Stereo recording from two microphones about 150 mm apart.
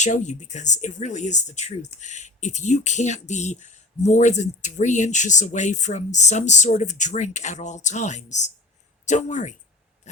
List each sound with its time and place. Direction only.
0.0 s speech: 55° left (ahead or behind)